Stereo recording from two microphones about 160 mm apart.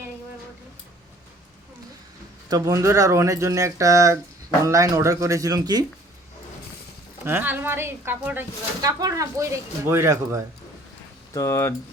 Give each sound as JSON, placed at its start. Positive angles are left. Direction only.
{"t": 2.5, "sound": "speech", "side_deg": -20}
{"t": 7.3, "sound": "a woman's voice", "side_deg": -15}
{"t": 8.8, "sound": "speech", "side_deg": -20}
{"t": 11.3, "sound": "speech", "side_deg": 15}